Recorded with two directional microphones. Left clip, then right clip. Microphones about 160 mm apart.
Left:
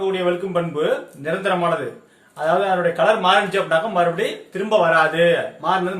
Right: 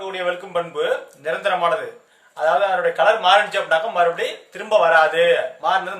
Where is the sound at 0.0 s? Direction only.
30° right (ahead or behind).